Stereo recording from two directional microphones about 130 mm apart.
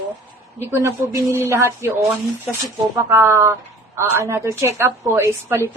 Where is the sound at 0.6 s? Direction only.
20° right (ahead or behind).